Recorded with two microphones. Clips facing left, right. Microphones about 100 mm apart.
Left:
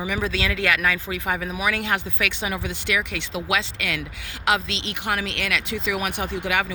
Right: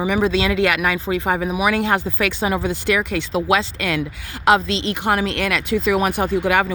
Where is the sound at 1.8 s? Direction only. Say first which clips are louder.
Right 6 dB; 35° right (ahead or behind).